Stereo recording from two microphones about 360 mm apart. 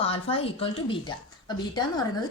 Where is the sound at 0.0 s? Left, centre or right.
Centre.